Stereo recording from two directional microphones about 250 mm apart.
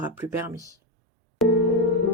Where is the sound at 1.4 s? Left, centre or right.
Centre.